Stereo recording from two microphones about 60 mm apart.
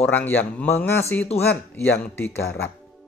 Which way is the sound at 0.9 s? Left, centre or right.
Left.